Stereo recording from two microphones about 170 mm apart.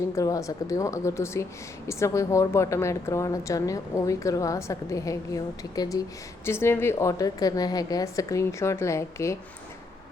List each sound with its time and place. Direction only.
0.2 s a woman's voice: 20° left (ahead or behind)